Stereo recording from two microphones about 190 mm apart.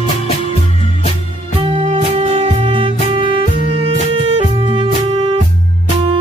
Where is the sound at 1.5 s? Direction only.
30° right (ahead or behind).